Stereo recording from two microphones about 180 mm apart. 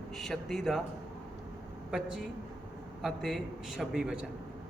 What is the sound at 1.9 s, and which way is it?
A man's voice, centre (ahead or behind).